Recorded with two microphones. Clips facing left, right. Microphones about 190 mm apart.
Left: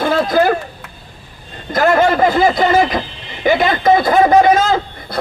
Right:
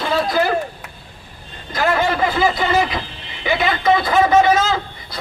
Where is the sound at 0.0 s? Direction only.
50° left (ahead or behind).